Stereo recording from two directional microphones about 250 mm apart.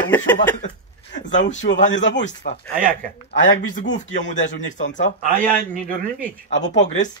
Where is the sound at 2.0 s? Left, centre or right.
Left.